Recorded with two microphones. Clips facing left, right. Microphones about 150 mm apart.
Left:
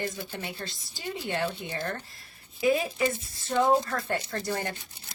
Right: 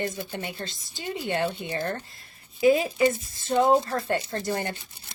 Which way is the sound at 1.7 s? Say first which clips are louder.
Right 4 dB; 35° right (ahead or behind).